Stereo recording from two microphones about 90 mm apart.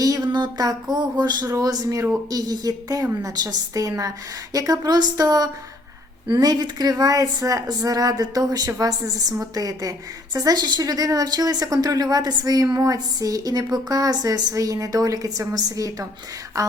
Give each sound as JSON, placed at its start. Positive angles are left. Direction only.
{"t": 0.0, "sound": "a sound", "side_deg": -45}
{"t": 0.3, "sound": "speech", "side_deg": -60}
{"t": 1.5, "sound": "a woman's voice", "side_deg": -40}